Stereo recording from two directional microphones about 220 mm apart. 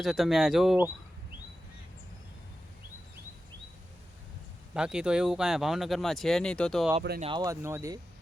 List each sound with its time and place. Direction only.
0.0 s speech: centre (ahead or behind)
4.7 s speech: 5° right (ahead or behind)
7.2 s speech: 20° right (ahead or behind)